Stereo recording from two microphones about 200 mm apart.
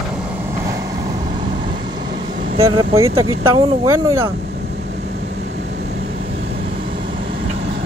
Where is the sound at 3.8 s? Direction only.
15° right (ahead or behind).